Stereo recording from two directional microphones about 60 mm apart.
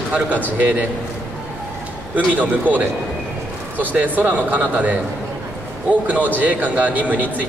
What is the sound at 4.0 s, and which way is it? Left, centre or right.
Speech, right.